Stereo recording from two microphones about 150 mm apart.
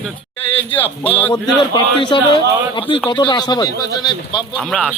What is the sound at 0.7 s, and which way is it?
Speech, 10° left (ahead or behind).